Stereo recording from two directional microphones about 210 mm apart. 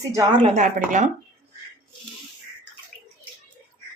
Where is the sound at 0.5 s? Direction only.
35° right (ahead or behind).